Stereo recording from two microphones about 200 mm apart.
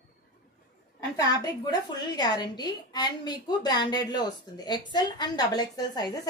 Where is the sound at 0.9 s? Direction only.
15° left (ahead or behind).